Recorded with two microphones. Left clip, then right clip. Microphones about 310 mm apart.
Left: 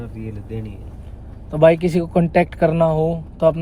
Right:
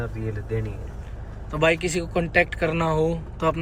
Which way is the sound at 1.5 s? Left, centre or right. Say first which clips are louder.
Left 8 dB; centre.